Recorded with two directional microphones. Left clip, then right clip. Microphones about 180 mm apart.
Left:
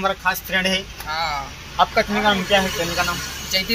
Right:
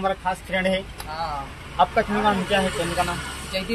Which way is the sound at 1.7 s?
5° left (ahead or behind).